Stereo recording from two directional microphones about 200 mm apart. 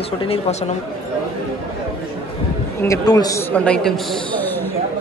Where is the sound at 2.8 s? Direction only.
15° left (ahead or behind).